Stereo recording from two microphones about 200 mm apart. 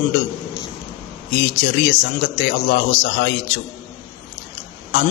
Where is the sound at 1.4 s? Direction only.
60° left (ahead or behind).